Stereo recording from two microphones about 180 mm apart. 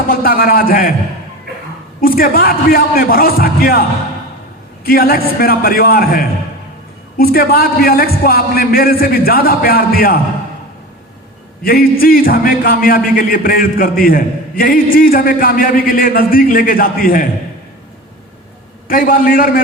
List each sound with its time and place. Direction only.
0.1 s a man's voice: 55° left (ahead or behind)
2.0 s a man's voice: 55° left (ahead or behind)
4.9 s a man's voice: 55° left (ahead or behind)
11.6 s a man's voice: 55° left (ahead or behind)
18.9 s a man's voice: 50° left (ahead or behind)